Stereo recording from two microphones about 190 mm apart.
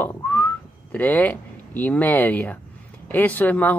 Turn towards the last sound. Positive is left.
turn(degrees=10)  # may be behind; listen again after turning